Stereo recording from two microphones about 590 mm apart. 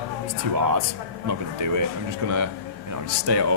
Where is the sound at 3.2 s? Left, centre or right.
Right.